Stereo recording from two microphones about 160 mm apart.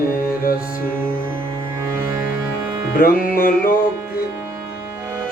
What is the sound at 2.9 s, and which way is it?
Music, 65° left (ahead or behind).